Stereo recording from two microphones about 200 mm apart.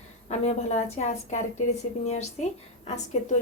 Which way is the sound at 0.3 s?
35° left (ahead or behind).